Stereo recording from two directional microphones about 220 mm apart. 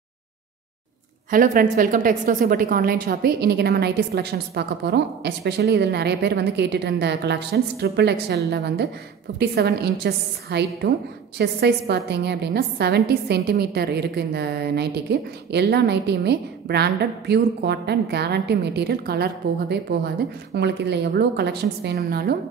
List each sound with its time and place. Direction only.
1.3 s a woman's voice: 40° right (ahead or behind)